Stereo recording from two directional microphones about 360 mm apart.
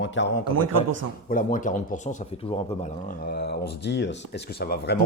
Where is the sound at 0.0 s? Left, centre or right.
Left.